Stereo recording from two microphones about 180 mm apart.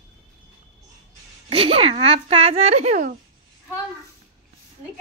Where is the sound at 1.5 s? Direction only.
30° right (ahead or behind).